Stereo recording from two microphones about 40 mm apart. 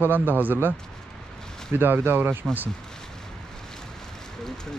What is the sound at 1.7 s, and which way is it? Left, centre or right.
Speech, right.